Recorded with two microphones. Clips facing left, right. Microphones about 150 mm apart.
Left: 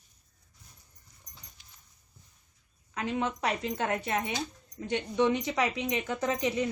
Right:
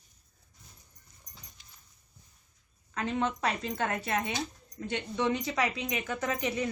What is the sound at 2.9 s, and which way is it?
Speech, 15° left (ahead or behind).